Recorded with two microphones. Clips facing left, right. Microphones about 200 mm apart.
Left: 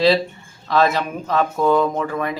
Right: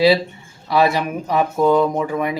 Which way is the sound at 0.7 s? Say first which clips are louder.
Right 1 dB; 10° right (ahead or behind).